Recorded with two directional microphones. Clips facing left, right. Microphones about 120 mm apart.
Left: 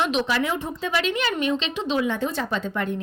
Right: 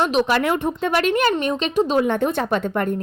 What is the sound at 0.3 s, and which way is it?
Speech, 60° right (ahead or behind).